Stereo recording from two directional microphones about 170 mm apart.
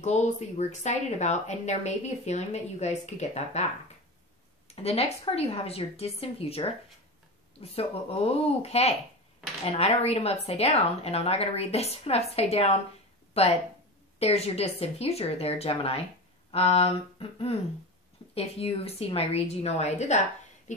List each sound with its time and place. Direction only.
0.0 s speech: 40° left (ahead or behind)
4.6 s speech: 35° left (ahead or behind)